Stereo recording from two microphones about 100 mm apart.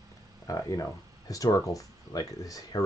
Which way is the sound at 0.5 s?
35° left (ahead or behind).